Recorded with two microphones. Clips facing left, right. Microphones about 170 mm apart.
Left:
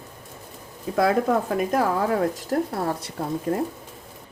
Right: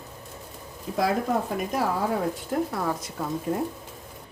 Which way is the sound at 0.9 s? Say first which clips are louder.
Left 4 dB; 60° left (ahead or behind).